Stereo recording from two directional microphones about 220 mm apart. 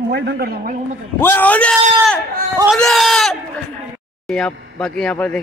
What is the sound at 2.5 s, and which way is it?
Speech, 10° right (ahead or behind).